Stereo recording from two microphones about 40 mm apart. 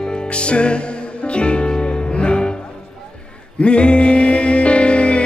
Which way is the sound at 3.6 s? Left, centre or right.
Left.